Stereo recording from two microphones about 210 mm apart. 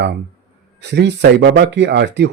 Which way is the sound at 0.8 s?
55° right (ahead or behind).